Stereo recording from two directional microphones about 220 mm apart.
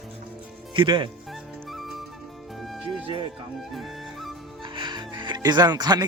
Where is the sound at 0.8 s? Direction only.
20° right (ahead or behind).